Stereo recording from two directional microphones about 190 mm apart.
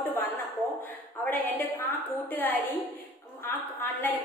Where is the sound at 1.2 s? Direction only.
10° left (ahead or behind).